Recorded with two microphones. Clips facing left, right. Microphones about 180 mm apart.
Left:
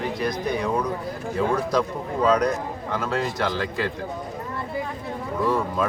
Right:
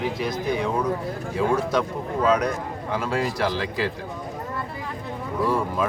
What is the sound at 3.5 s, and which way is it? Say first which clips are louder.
Speech: even; 30° right (ahead or behind).